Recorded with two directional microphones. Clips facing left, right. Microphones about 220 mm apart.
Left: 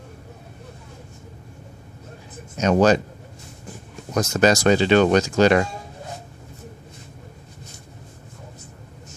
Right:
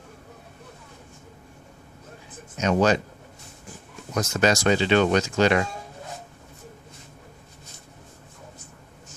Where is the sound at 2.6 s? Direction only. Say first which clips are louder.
Left 4 dB; 40° left (ahead or behind).